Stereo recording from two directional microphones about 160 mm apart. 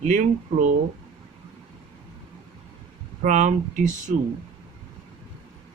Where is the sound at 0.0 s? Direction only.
45° right (ahead or behind).